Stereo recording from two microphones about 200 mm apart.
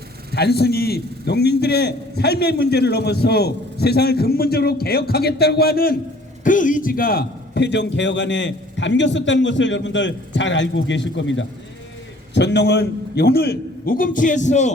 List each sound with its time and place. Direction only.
0.3 s a man's voice: 55° left (ahead or behind); by 14.7 s 35° left (ahead or behind)